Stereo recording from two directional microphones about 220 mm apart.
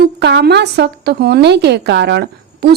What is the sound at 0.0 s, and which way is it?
A woman's voice, 50° right (ahead or behind).